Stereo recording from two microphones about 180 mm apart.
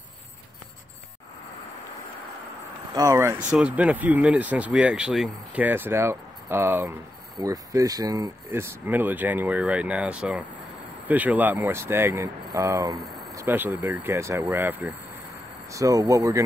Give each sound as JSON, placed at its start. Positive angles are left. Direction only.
{"t": 2.9, "sound": "speech", "side_deg": -15}